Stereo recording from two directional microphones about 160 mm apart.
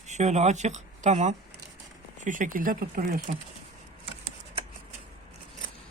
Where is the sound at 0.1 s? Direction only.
45° right (ahead or behind).